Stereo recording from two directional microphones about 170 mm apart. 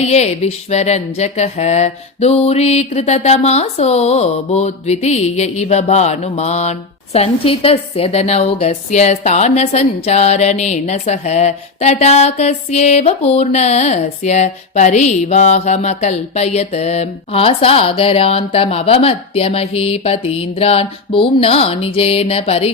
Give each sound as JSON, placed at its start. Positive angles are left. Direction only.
{"t": 0.0, "sound": "speech", "side_deg": 40}